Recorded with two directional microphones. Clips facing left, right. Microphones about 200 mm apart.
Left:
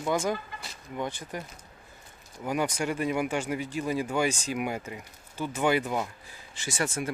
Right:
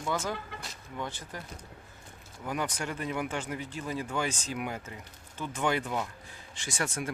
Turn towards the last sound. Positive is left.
turn(degrees=0)  # may be behind; listen again after turning